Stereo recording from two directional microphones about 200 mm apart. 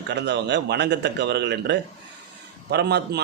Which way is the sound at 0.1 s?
60° right (ahead or behind).